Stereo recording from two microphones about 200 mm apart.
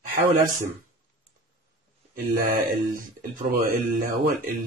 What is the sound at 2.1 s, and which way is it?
Speech, 45° right (ahead or behind).